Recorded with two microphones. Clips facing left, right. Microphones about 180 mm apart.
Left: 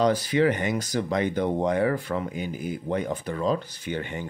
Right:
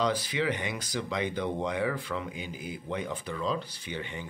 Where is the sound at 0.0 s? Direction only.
45° left (ahead or behind).